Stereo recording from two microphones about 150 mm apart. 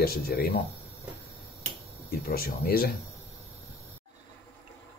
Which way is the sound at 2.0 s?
90° left.